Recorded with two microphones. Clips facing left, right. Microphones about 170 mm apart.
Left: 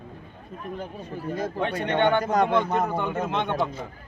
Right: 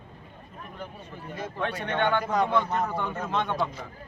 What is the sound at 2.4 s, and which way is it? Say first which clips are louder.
A man's voice: left 3 dB; 20° left (ahead or behind).